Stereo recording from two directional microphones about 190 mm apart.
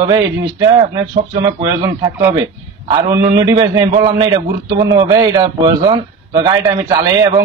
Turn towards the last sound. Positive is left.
turn(degrees=-20)  # may be behind; listen again after turning